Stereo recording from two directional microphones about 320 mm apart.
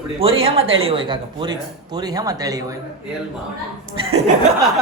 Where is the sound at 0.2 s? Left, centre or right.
Centre.